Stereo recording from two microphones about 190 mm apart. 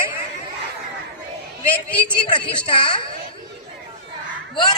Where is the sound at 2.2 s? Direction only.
25° left (ahead or behind).